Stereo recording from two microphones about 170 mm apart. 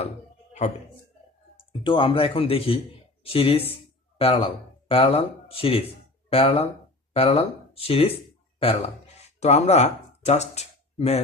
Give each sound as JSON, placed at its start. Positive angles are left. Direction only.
{"t": 1.8, "sound": "speech", "side_deg": 30}